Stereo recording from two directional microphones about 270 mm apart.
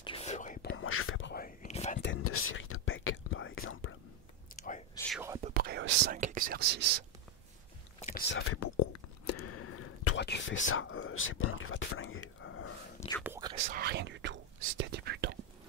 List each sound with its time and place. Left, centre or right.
0.0 s whispering: left
0.8 s whispering: left
2.0 s whispering: left
5.1 s whispering: centre
5.4 s whispering: right
8.0 s whispering: left
8.5 s whispering: left
10.1 s whispering: left
13.2 s whispering: centre
13.7 s whispering: right